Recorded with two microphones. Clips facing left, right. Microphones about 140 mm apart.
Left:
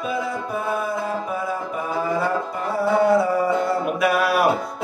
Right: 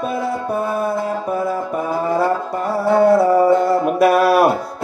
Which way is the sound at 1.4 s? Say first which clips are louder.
Right 5 dB; 60° right (ahead or behind).